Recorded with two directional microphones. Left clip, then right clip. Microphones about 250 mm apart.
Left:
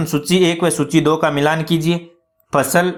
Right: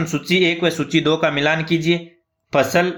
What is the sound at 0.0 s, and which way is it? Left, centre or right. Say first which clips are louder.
Speech: left 2 dB; centre.